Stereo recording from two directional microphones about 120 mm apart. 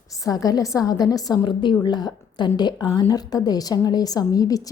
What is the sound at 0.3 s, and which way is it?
A woman's voice, 30° left (ahead or behind).